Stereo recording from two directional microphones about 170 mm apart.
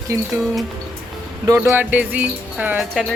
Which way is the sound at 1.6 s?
10° right (ahead or behind).